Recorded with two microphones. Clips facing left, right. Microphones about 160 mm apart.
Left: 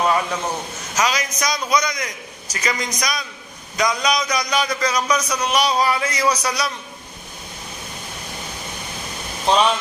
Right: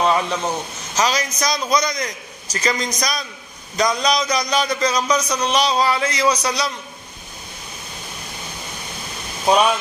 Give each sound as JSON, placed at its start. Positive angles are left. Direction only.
{"t": 0.0, "sound": "a sound", "side_deg": -20}
{"t": 0.9, "sound": "a man's voice", "side_deg": -30}
{"t": 9.5, "sound": "speech", "side_deg": -10}